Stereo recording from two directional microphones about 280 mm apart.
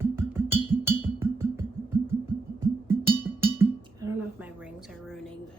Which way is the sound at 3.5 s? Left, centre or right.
Centre.